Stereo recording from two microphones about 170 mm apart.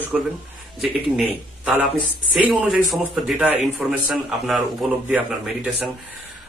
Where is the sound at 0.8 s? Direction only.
5° right (ahead or behind).